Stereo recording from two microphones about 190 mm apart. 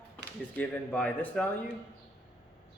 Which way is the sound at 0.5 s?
10° left (ahead or behind).